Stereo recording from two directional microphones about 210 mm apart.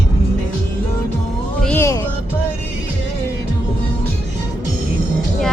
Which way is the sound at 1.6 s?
10° left (ahead or behind).